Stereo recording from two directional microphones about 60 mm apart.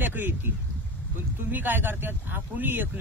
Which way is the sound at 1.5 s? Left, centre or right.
Right.